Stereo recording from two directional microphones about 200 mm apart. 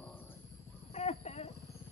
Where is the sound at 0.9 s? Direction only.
35° left (ahead or behind).